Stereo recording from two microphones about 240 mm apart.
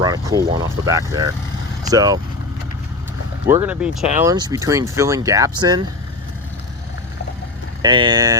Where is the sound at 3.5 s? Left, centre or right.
Centre.